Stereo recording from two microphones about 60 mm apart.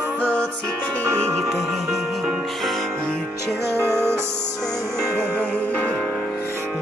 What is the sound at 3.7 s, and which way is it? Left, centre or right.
Music, right.